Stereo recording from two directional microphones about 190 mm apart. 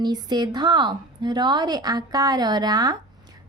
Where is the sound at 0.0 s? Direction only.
20° right (ahead or behind).